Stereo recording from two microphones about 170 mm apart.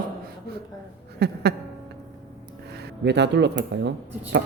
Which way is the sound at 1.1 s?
75° right (ahead or behind).